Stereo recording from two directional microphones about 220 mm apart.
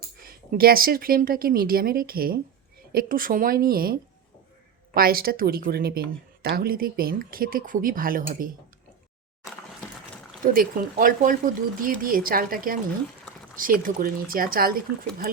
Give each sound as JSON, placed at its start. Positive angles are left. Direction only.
{"t": 0.2, "sound": "speech", "side_deg": -40}
{"t": 4.9, "sound": "speech", "side_deg": -45}
{"t": 10.4, "sound": "speech", "side_deg": -40}